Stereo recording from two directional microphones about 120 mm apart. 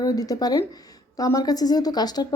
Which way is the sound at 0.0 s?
30° left (ahead or behind).